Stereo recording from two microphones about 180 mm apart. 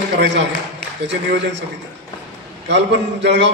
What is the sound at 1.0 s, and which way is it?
Speech, 75° right (ahead or behind).